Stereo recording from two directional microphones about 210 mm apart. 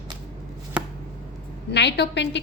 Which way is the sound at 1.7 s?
55° left (ahead or behind).